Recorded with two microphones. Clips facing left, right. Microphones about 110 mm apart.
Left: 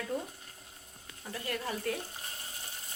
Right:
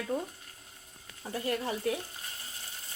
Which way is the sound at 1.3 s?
25° right (ahead or behind).